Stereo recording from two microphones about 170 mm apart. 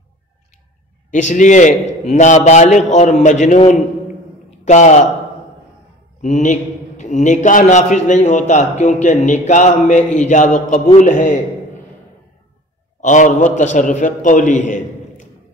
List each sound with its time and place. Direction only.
1.1 s a man's voice: 45° left (ahead or behind)
6.2 s a man's voice: 45° left (ahead or behind)
13.0 s a man's voice: 45° left (ahead or behind)